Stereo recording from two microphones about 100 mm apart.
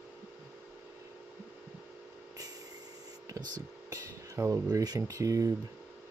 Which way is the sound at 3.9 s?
30° right (ahead or behind).